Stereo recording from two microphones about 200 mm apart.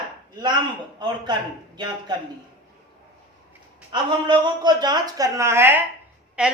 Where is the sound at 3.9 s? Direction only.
25° right (ahead or behind).